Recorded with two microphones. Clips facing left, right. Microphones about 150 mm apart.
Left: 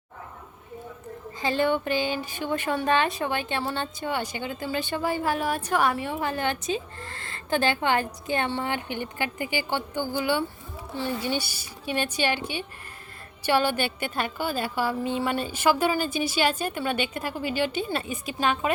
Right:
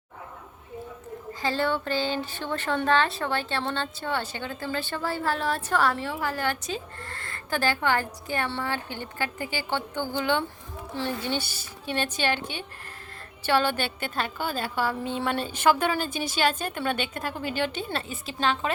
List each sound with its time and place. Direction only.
1.4 s speech: 15° left (ahead or behind)